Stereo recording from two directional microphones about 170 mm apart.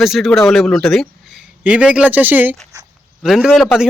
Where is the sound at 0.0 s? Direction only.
Centre (ahead or behind).